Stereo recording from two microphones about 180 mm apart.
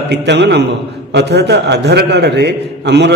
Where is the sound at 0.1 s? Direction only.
70° right (ahead or behind).